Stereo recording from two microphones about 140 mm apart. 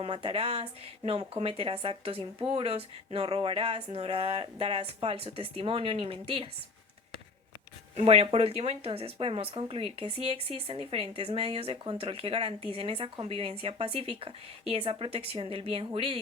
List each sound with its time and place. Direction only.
0.0 s speech: 40° right (ahead or behind)
7.9 s speech: 45° right (ahead or behind)